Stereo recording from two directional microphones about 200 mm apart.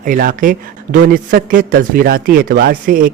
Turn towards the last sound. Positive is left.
turn(degrees=-45)  # may be behind; listen again after turning